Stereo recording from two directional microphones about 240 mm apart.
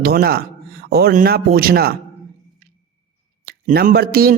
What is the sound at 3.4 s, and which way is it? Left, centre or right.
Speech, right.